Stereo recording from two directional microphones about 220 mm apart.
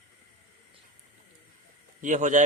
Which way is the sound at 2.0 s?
35° right (ahead or behind).